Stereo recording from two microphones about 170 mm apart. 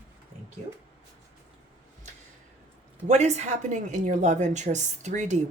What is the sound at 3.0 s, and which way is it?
A woman's voice, 40° right (ahead or behind).